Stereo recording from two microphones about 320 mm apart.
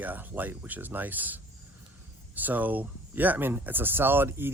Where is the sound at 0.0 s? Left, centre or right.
Centre.